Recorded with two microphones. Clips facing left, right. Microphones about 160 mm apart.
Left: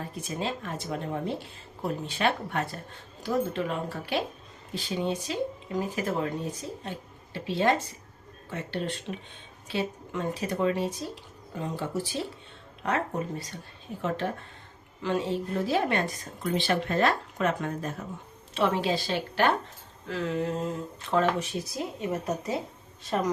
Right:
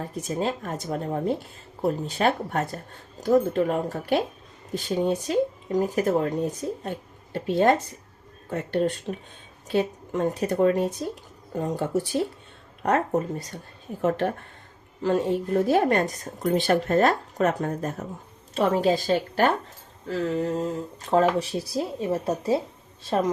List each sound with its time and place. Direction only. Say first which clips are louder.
0.0 s speech: right 5 dB; 45° right (ahead or behind)
14.0 s speech: right 6 dB; 55° right (ahead or behind)
15.0 s speech: right 5 dB; 45° right (ahead or behind)
21.0 s a woman's voice: right 5 dB; 40° right (ahead or behind)